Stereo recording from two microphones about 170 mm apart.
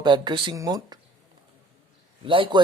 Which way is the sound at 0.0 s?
25° right (ahead or behind).